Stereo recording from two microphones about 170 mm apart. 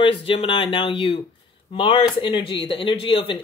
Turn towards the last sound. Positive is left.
turn(degrees=30)  # may be behind; listen again after turning